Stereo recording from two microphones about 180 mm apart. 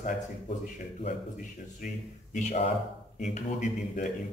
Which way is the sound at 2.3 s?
40° left (ahead or behind).